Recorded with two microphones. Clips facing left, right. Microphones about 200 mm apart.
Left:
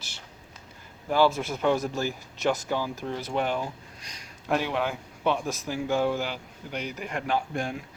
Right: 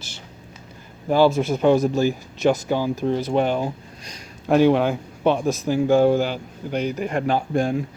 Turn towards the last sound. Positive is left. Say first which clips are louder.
# right 8 dB
turn(degrees=-35)  # may be behind; listen again after turning